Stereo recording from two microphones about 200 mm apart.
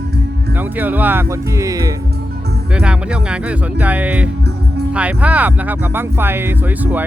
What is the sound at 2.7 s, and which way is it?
Speech, 5° right (ahead or behind).